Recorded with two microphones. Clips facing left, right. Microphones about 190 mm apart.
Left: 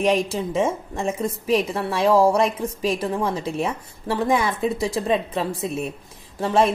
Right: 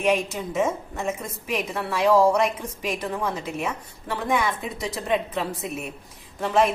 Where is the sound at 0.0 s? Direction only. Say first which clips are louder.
Left 3 dB; 35° left (ahead or behind).